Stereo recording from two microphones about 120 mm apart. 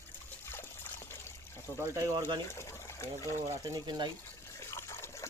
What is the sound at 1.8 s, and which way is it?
Speech, 25° right (ahead or behind).